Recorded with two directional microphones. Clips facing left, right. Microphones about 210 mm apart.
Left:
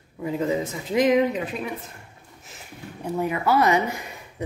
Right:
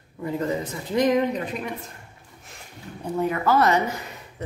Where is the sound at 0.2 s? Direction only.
10° left (ahead or behind).